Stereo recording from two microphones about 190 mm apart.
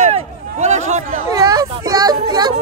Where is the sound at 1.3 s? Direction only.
20° right (ahead or behind).